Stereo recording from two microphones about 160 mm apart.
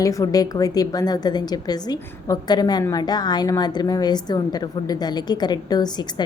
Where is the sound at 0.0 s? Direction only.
20° left (ahead or behind).